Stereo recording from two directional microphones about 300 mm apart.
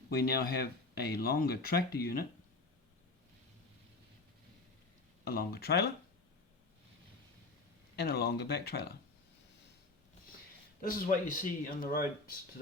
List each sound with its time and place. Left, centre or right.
0.1 s speech: left
5.2 s speech: left
7.9 s speech: left
10.8 s speech: left